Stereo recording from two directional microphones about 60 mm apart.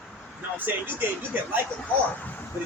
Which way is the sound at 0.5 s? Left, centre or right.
Right.